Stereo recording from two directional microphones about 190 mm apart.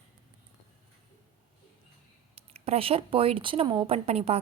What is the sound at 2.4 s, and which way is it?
Speech, 30° right (ahead or behind).